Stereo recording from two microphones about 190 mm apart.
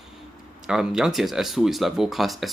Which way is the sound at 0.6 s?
5° right (ahead or behind).